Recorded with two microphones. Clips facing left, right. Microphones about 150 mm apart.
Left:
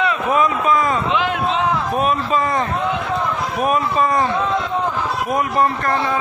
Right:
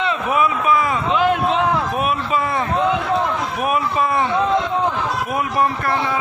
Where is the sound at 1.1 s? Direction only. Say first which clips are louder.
Right 2 dB; 45° right (ahead or behind).